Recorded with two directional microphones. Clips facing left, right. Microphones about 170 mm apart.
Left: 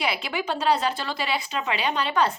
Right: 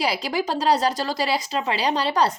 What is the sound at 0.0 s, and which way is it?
A woman's voice, 35° right (ahead or behind).